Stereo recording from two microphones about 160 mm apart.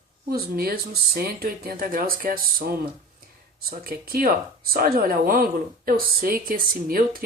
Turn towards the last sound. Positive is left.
turn(degrees=-65)  # may be behind; listen again after turning